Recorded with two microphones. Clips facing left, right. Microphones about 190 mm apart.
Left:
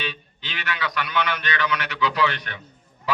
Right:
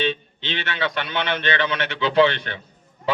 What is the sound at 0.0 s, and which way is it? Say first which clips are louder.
A man's voice: right 9 dB; 25° right (ahead or behind).